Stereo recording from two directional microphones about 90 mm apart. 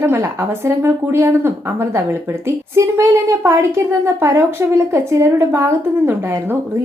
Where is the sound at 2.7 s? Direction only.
35° right (ahead or behind).